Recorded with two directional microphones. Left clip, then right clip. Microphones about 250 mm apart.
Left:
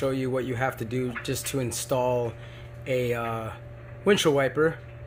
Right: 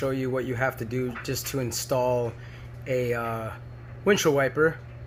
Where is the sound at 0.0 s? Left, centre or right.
Centre.